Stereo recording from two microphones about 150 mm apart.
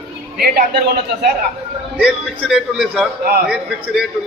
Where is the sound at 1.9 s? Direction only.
5° right (ahead or behind).